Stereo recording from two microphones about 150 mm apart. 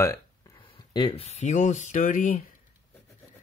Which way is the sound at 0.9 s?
30° left (ahead or behind).